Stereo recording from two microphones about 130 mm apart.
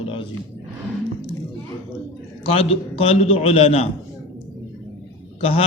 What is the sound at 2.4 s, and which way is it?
A man's voice, 50° left (ahead or behind).